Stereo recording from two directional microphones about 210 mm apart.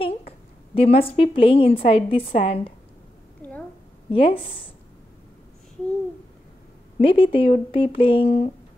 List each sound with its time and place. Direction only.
0.7 s a woman's voice: 25° left (ahead or behind)
4.1 s a woman's voice: 25° left (ahead or behind)
7.0 s a woman's voice: 25° left (ahead or behind)